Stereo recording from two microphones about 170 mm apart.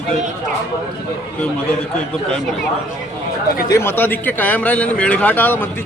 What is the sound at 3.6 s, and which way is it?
A man's voice, 15° left (ahead or behind).